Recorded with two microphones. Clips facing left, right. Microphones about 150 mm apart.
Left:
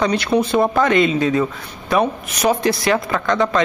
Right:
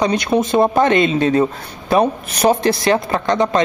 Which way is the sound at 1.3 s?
35° right (ahead or behind).